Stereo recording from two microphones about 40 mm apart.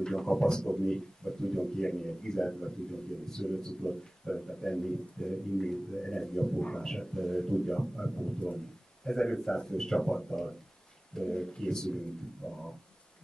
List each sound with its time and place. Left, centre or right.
0.0 s a man's voice: centre